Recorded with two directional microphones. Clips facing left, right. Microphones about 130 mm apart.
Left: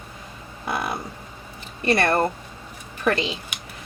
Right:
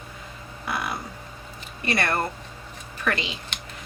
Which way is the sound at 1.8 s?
30° left (ahead or behind).